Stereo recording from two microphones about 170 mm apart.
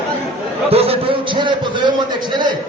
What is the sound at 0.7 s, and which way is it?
A man's voice, 35° right (ahead or behind).